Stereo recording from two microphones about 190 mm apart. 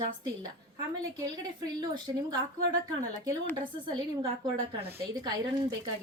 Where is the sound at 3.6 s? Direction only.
25° right (ahead or behind).